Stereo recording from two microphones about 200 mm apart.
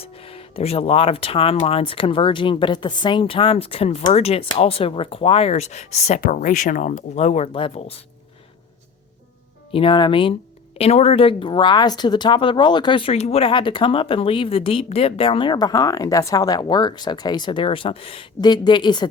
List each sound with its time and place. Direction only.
0.0 s speech: 30° left (ahead or behind)
9.7 s speech: 25° left (ahead or behind)